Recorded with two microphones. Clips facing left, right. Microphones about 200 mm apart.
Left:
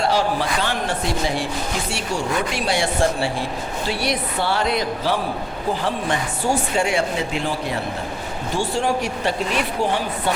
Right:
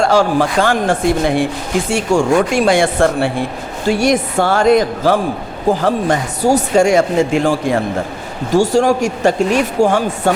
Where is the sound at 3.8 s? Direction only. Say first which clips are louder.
Right 11 dB; 45° right (ahead or behind).